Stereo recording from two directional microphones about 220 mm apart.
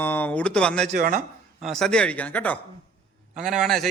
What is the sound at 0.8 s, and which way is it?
Speech, 40° right (ahead or behind).